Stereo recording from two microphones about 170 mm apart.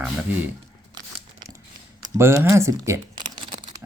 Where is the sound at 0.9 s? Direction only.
25° right (ahead or behind).